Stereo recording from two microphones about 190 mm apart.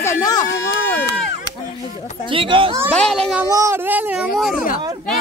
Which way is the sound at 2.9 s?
5° left (ahead or behind).